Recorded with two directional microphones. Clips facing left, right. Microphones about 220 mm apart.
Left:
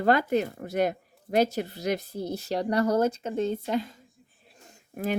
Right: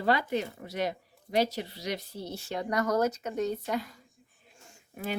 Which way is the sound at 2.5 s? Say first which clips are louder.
Left 4 dB; 35° left (ahead or behind).